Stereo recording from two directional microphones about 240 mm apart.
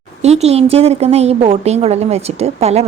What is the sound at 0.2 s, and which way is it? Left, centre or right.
A woman's voice, right.